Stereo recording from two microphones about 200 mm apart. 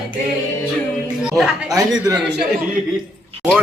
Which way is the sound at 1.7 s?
20° right (ahead or behind).